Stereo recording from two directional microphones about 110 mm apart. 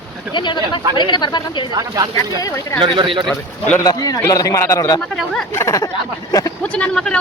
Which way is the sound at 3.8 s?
35° left (ahead or behind).